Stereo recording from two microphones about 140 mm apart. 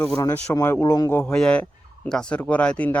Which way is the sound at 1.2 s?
5° left (ahead or behind).